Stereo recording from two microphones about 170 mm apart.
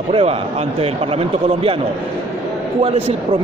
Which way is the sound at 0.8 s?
35° right (ahead or behind).